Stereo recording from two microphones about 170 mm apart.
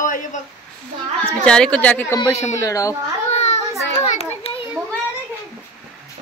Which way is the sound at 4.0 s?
35° left (ahead or behind).